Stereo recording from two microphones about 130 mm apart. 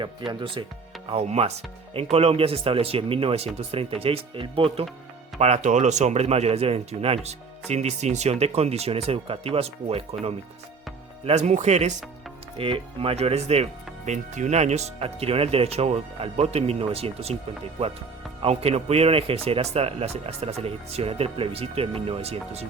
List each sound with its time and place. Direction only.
0.0 s speech: 40° right (ahead or behind)
1.1 s speech: 55° right (ahead or behind)
5.4 s speech: 60° right (ahead or behind)
12.5 s speech: 45° right (ahead or behind)